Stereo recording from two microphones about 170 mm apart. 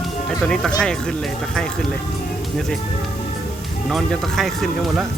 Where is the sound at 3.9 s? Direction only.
Centre (ahead or behind).